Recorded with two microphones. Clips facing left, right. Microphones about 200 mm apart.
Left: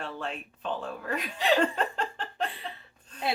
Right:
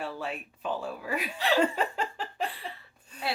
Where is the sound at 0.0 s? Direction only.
5° right (ahead or behind).